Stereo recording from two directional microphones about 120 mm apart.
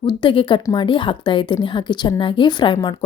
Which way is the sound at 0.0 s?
40° left (ahead or behind).